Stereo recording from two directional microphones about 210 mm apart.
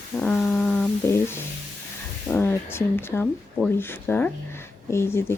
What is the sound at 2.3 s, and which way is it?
Speech, 10° left (ahead or behind).